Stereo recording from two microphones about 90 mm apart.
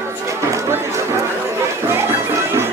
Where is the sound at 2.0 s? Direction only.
30° right (ahead or behind).